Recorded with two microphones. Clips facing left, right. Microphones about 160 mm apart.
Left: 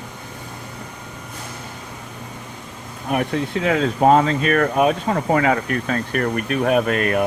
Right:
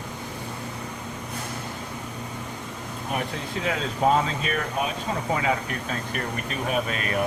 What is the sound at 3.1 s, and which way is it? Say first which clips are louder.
Speech: left 9 dB; 60° left (ahead or behind).